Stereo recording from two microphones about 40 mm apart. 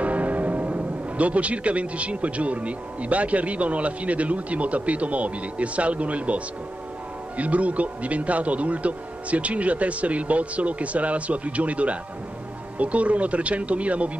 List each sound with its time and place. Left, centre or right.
0.0 s speech: right